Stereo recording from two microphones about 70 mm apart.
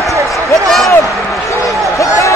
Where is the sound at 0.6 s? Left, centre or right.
Centre.